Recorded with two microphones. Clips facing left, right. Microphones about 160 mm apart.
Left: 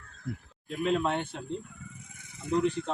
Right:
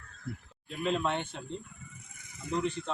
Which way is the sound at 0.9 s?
10° left (ahead or behind).